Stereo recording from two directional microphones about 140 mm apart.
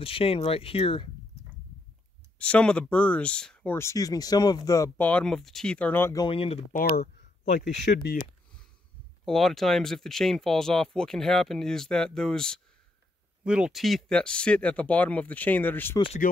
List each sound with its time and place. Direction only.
0.0 s speech: 40° left (ahead or behind)
2.3 s speech: 10° left (ahead or behind)
3.7 s speech: 20° left (ahead or behind)
4.9 s speech: 10° left (ahead or behind)
6.1 s speech: 40° left (ahead or behind)
6.7 s speech: 90° left
9.2 s speech: centre (ahead or behind)
13.4 s speech: 5° right (ahead or behind); by 16.0 s 15° left (ahead or behind)